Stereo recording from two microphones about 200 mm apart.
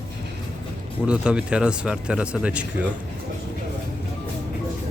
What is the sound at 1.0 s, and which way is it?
Speech, 5° right (ahead or behind).